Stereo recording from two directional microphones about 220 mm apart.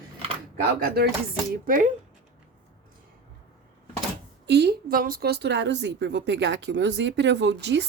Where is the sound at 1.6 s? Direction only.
40° right (ahead or behind).